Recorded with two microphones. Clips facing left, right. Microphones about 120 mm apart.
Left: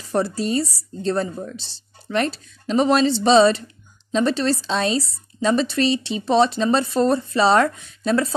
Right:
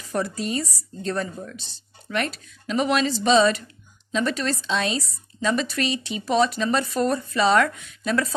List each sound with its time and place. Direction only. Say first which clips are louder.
0.0 s a woman's voice: left 5 dB; 30° left (ahead or behind)